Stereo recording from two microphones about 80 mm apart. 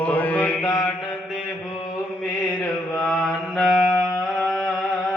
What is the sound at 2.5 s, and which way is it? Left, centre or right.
Mantra, centre.